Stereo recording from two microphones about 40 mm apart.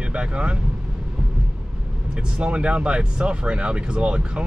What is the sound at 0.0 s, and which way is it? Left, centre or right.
Speech, right.